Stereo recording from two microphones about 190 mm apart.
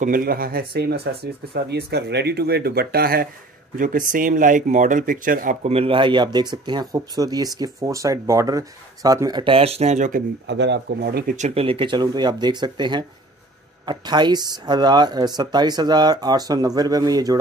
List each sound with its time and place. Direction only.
0.0 s speech: 50° right (ahead or behind)
10.4 s speech: 70° right (ahead or behind)
11.3 s speech: 35° right (ahead or behind)